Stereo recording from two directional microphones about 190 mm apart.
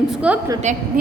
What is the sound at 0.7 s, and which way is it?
Speech, 40° right (ahead or behind).